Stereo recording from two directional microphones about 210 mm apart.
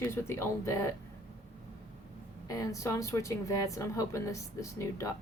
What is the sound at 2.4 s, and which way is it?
Speech, 15° left (ahead or behind).